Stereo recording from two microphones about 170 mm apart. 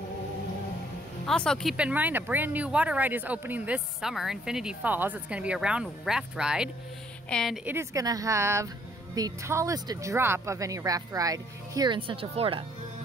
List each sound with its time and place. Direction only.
1.2 s a woman's voice: 5° left (ahead or behind)
7.6 s speech: 15° right (ahead or behind); by 12.6 s 35° right (ahead or behind)